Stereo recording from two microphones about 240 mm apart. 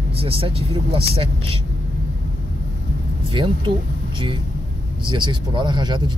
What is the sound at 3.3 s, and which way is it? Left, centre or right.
Speech, right.